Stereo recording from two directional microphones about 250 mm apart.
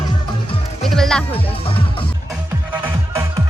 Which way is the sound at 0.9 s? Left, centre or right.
Centre.